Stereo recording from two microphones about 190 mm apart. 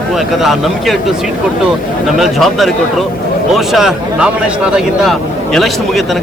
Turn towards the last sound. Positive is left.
turn(degrees=0)  # may be behind; listen again after turning